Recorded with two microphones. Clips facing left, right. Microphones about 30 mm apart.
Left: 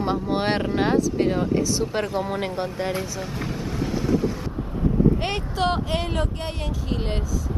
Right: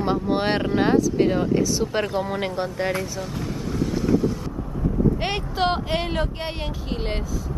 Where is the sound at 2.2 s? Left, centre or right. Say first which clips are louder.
Right 1 dB; centre.